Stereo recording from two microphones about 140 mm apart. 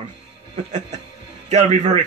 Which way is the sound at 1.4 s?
55° right (ahead or behind).